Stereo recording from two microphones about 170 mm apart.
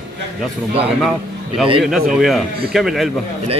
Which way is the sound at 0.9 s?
Centre (ahead or behind).